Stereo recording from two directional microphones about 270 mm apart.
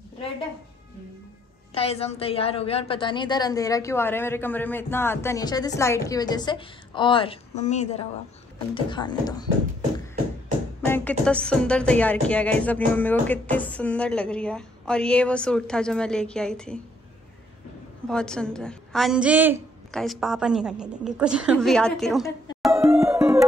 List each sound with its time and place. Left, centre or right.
1.7 s a woman's voice: left
10.8 s speech: centre
18.0 s speech: centre
22.7 s music: centre